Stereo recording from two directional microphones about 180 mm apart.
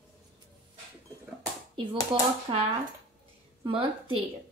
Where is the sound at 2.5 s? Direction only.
30° right (ahead or behind).